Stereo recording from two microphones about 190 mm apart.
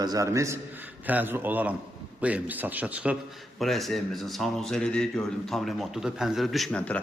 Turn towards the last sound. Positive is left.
turn(degrees=5)  # may be behind; listen again after turning